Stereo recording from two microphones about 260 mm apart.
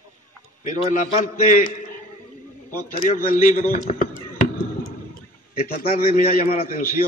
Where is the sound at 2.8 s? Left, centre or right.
Left.